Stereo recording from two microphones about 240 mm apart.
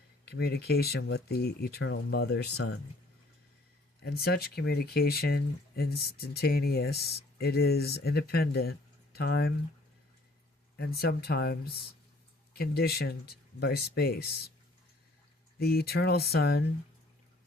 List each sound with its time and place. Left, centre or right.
0.3 s speech: left
4.0 s speech: left
10.8 s speech: left
15.5 s speech: left